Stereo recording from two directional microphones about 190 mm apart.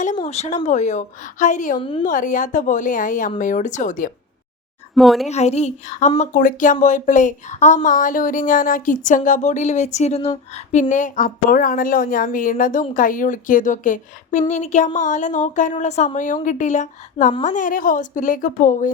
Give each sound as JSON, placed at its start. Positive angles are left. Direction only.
{"t": 0.3, "sound": "a woman's voice", "side_deg": 35}
{"t": 4.9, "sound": "speech", "side_deg": 0}
{"t": 5.3, "sound": "a woman's voice", "side_deg": 35}